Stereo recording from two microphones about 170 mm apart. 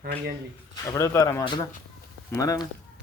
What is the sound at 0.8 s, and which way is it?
Speech, 20° left (ahead or behind).